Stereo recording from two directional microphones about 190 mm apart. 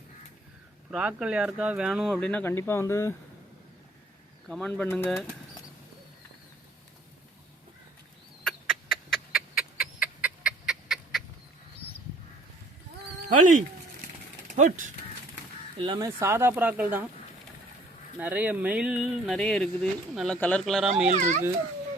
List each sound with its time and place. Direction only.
0.9 s speech: 5° right (ahead or behind); by 3.2 s 15° left (ahead or behind)
4.4 s speech: 5° left (ahead or behind)
8.4 s chicken: centre (ahead or behind)
13.2 s speech: 45° right (ahead or behind)
15.8 s speech: 20° right (ahead or behind)
18.2 s speech: 10° right (ahead or behind)
21.1 s speech: 40° right (ahead or behind)